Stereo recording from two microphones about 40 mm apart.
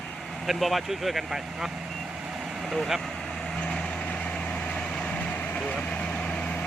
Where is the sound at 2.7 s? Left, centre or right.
Centre.